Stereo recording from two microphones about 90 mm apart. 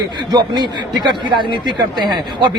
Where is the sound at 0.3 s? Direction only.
55° right (ahead or behind).